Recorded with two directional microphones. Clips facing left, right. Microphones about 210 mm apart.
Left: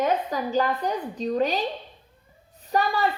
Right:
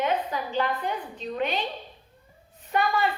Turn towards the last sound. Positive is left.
turn(degrees=35)  # may be behind; listen again after turning